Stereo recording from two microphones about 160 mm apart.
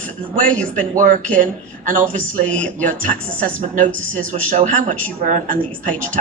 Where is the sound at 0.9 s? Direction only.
55° right (ahead or behind).